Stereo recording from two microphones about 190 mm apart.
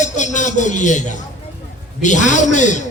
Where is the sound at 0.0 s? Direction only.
40° left (ahead or behind).